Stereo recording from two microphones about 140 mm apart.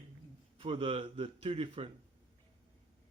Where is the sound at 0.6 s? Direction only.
40° right (ahead or behind).